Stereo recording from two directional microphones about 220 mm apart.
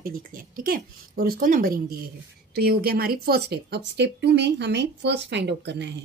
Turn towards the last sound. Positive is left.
turn(degrees=-50)  # may be behind; listen again after turning